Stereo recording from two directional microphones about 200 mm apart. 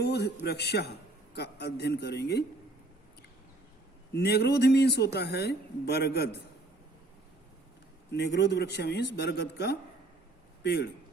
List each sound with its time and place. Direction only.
0.0 s speech: 55° left (ahead or behind)
4.1 s speech: 55° left (ahead or behind)
8.1 s a man's voice: 60° left (ahead or behind)